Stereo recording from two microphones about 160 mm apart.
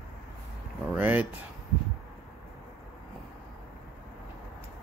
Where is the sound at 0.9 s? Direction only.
10° right (ahead or behind).